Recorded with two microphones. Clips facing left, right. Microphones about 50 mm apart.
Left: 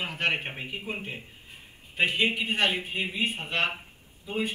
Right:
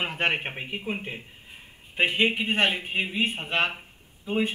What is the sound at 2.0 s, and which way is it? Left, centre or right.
A man's voice, right.